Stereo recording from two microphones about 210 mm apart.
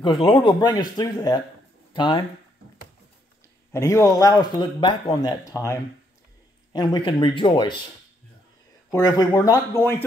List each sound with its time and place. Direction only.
0.0 s speech: 20° left (ahead or behind)
3.7 s speech: 15° left (ahead or behind)
6.7 s speech: 20° left (ahead or behind)
8.9 s speech: 15° left (ahead or behind)